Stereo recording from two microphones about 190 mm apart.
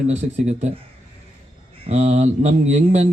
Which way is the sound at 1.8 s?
35° right (ahead or behind).